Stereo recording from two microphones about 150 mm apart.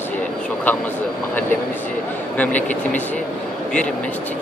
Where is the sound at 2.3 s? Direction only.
10° left (ahead or behind).